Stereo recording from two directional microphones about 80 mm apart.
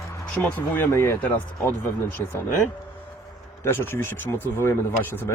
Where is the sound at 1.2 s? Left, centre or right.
Left.